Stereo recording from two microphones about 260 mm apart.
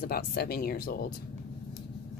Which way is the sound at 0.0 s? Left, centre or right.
Left.